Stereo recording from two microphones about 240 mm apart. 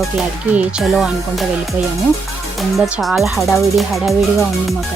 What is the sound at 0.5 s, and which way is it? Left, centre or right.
Music, centre.